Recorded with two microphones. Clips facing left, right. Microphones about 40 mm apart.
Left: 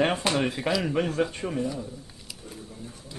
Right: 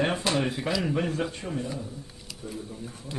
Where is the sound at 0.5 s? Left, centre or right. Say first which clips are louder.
Left 2 dB; centre.